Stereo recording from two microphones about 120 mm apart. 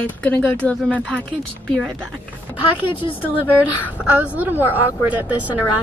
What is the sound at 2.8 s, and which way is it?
Speech, 50° left (ahead or behind).